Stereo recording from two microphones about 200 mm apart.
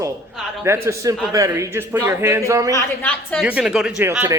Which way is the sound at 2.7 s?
10° left (ahead or behind).